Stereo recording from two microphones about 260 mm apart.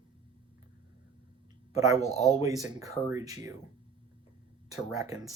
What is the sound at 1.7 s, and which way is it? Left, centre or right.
Speech, centre.